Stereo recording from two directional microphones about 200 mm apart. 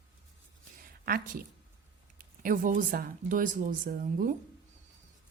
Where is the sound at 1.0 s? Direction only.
45° right (ahead or behind).